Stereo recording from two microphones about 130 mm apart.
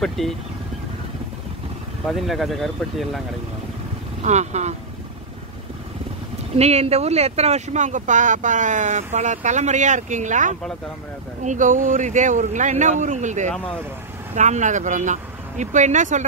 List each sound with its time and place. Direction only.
0.0 s speech: centre (ahead or behind)
2.0 s speech: centre (ahead or behind)
4.2 s speech: 60° right (ahead or behind)
6.5 s speech: 55° right (ahead or behind); by 16.3 s 75° right (ahead or behind)